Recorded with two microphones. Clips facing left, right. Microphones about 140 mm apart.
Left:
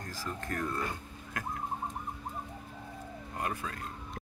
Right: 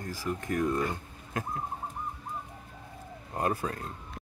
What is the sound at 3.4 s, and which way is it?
Speech, 35° right (ahead or behind).